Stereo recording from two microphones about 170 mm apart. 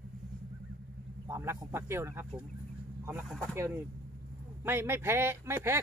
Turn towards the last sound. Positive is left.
turn(degrees=-15)  # may be behind; listen again after turning